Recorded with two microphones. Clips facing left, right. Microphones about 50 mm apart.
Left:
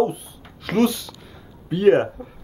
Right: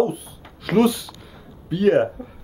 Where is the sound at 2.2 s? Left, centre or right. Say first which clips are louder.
Right 1 dB; centre.